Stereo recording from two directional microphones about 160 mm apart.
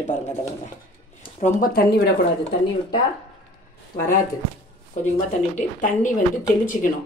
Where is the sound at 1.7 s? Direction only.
85° left.